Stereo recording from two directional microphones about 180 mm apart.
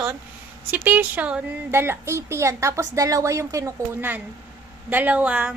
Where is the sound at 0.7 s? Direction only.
10° right (ahead or behind).